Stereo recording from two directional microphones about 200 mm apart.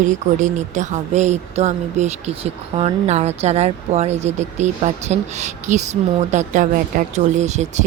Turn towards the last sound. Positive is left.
turn(degrees=-35)  # may be behind; listen again after turning